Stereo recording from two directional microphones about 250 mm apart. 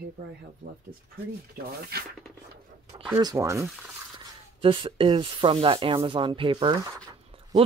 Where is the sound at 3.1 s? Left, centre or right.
Centre.